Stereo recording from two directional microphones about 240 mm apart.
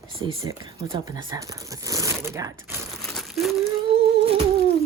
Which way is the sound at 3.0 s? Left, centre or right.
Centre.